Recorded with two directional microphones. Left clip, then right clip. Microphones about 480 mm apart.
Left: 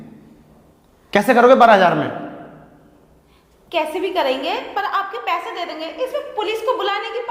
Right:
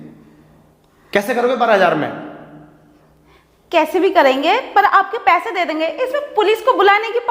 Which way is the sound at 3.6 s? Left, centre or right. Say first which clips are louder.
Right 6 dB; right.